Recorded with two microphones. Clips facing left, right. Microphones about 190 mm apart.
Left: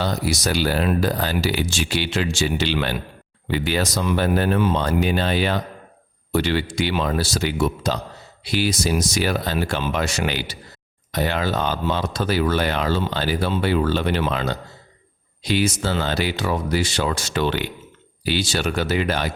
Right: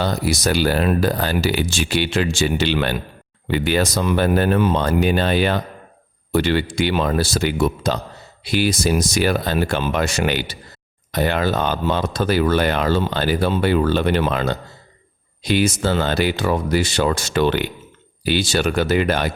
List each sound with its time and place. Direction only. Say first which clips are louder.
0.0 s speech: right 3 dB; 55° right (ahead or behind)